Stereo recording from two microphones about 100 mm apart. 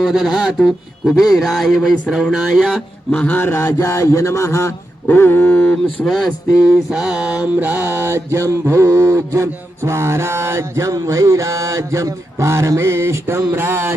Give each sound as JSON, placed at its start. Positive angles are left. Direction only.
{"t": 0.0, "sound": "speech", "side_deg": -5}
{"t": 3.1, "sound": "speech", "side_deg": 15}
{"t": 6.7, "sound": "mantra", "side_deg": -5}